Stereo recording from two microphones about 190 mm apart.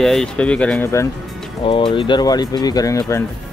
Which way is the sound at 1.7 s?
30° left (ahead or behind).